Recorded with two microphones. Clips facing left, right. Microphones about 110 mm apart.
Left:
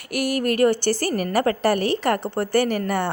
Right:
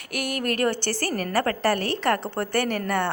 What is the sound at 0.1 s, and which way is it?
A woman's voice, 5° left (ahead or behind).